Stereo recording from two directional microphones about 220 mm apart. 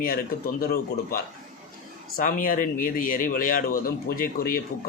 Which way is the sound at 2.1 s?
40° left (ahead or behind).